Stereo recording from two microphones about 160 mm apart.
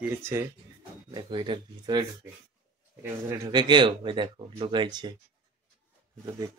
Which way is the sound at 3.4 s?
30° right (ahead or behind).